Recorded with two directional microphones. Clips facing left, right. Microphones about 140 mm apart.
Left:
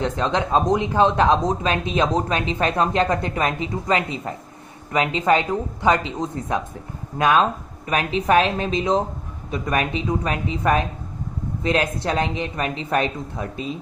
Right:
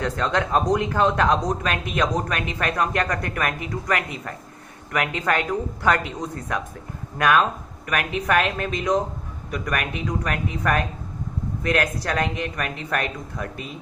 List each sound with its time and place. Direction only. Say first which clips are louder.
0.0 s speech: left 1 dB; 20° left (ahead or behind)